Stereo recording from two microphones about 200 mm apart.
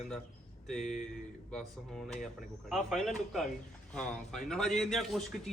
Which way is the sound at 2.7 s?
Centre (ahead or behind).